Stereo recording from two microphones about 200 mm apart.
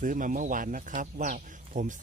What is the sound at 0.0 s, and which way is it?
Speech, 40° right (ahead or behind).